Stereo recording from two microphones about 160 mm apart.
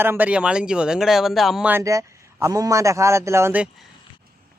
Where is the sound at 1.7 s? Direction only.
15° right (ahead or behind).